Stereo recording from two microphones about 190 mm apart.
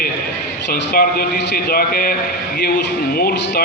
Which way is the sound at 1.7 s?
50° left (ahead or behind).